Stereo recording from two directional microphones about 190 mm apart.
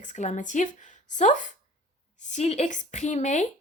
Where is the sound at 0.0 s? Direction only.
40° left (ahead or behind).